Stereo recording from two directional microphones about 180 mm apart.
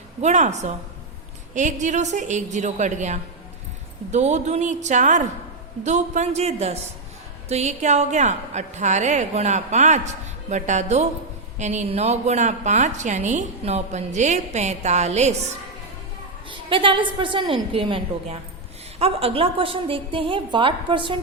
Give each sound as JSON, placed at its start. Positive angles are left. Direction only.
{"t": 0.2, "sound": "a woman's voice", "side_deg": -40}
{"t": 16.5, "sound": "a woman's voice", "side_deg": -30}